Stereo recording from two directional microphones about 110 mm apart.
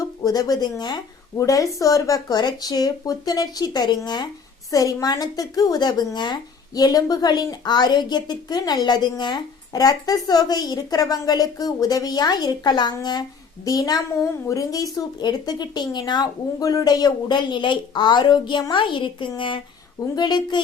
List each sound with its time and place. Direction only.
0.2 s speech: 35° left (ahead or behind)